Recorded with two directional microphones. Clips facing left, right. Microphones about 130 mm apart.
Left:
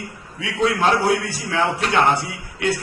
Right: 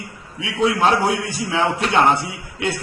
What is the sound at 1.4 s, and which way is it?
A man's voice, 20° right (ahead or behind).